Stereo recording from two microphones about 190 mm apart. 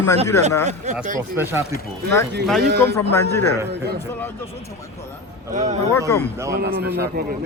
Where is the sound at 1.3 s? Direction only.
15° right (ahead or behind).